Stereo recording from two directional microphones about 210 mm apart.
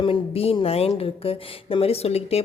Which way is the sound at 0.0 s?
25° left (ahead or behind).